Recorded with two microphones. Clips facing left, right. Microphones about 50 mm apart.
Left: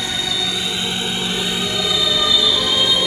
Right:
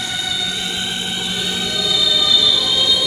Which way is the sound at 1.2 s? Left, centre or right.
Left.